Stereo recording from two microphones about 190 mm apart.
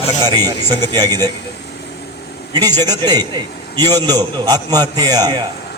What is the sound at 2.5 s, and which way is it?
A man's voice, 20° right (ahead or behind).